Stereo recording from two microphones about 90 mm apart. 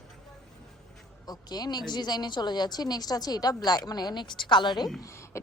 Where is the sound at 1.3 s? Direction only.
50° left (ahead or behind).